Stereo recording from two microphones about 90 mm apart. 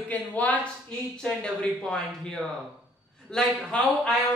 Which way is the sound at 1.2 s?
5° left (ahead or behind).